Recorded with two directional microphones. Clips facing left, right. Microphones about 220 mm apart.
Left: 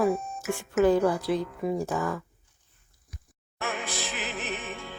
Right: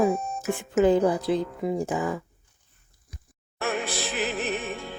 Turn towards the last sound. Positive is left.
turn(degrees=-40)  # may be behind; listen again after turning